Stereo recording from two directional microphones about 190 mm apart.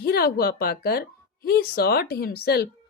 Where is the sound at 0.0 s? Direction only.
55° left (ahead or behind).